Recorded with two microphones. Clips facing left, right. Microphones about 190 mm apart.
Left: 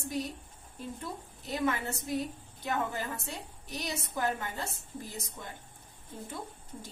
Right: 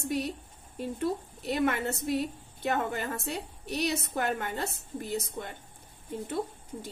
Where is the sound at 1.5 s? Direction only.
70° right (ahead or behind).